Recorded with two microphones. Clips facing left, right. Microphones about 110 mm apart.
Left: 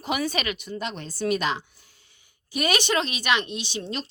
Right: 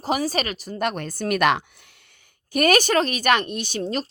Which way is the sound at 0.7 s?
55° right (ahead or behind).